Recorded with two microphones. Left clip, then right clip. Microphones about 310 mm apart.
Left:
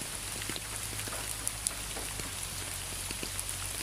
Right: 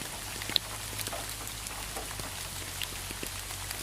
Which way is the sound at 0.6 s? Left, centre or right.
Right.